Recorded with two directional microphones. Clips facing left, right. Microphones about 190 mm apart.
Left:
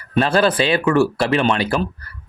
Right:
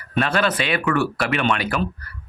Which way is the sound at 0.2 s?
30° left (ahead or behind).